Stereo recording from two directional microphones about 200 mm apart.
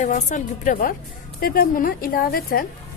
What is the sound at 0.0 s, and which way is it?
A woman's voice, 35° left (ahead or behind).